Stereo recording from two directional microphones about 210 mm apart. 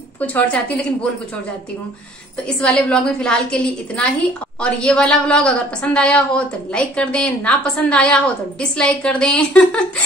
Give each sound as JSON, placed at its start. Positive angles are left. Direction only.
{"t": 0.2, "sound": "a woman's voice", "side_deg": 5}
{"t": 2.4, "sound": "a woman's voice", "side_deg": 5}